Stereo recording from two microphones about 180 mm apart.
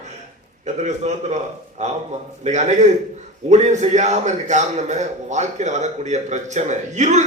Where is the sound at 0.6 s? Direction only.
40° right (ahead or behind).